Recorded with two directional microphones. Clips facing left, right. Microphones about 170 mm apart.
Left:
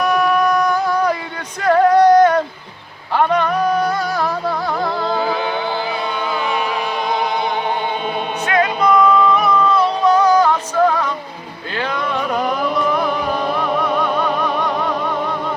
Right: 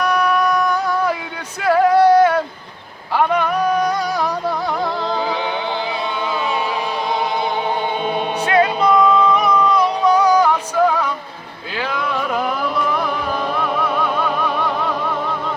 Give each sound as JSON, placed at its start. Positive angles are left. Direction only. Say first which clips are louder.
{"t": 0.0, "sound": "music", "louder": "left 2 dB", "side_deg": 0}
{"t": 1.6, "sound": "a sound", "louder": "left 1 dB", "side_deg": -5}
{"t": 3.2, "sound": "music", "louder": "left 1 dB", "side_deg": -10}
{"t": 8.4, "sound": "music", "louder": "even", "side_deg": -30}
{"t": 11.8, "sound": "a sound", "louder": "left 1 dB", "side_deg": -5}
{"t": 13.6, "sound": "music", "louder": "left 2 dB", "side_deg": 0}